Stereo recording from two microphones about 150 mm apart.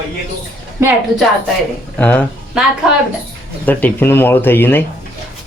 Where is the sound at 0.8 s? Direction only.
20° right (ahead or behind).